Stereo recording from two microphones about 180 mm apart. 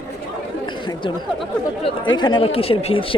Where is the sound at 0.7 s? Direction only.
25° left (ahead or behind).